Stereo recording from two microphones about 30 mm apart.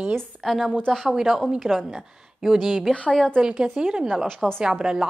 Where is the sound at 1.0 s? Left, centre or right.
Centre.